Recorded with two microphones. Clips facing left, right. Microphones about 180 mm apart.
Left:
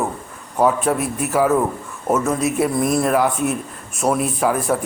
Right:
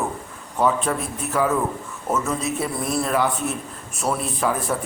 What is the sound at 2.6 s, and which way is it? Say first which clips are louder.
Speech: left 6 dB; 10° left (ahead or behind).